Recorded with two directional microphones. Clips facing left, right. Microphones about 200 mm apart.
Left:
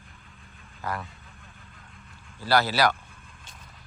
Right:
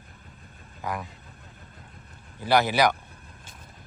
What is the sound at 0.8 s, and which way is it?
Speech, 15° right (ahead or behind).